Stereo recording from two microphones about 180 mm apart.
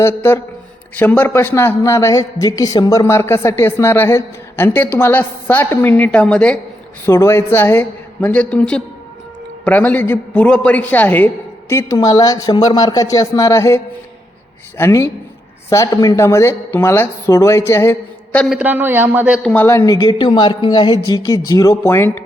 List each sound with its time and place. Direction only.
0.0 s a man's voice: 15° left (ahead or behind)
18.4 s a man's voice: 5° right (ahead or behind)
19.5 s a woman's voice: 15° left (ahead or behind)